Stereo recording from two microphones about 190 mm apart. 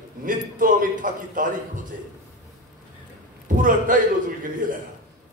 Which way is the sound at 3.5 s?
45° right (ahead or behind).